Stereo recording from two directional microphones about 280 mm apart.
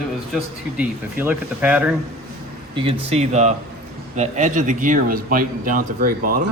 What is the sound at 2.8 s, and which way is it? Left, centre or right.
Speech, right.